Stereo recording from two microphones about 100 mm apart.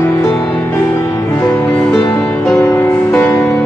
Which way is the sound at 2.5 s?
20° left (ahead or behind).